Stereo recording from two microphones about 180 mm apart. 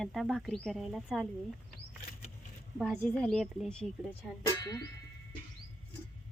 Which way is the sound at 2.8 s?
5° left (ahead or behind).